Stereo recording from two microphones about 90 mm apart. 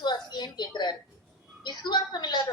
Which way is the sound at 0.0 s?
55° left (ahead or behind).